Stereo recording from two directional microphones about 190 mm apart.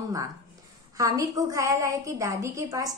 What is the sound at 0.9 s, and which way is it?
A woman's voice, 15° right (ahead or behind).